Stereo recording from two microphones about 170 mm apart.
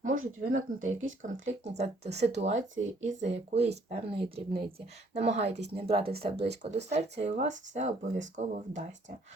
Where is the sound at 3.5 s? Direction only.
40° right (ahead or behind).